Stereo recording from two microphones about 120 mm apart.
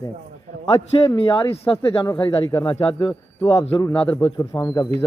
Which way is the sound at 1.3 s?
45° left (ahead or behind).